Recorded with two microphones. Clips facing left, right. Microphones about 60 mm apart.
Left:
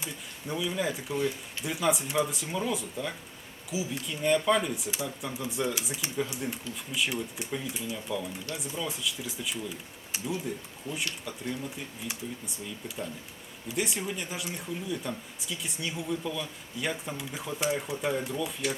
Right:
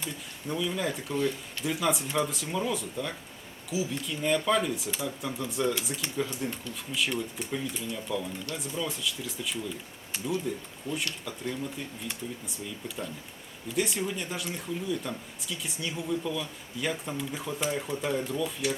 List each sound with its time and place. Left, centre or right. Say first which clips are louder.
0.0 s speech: right 2 dB; centre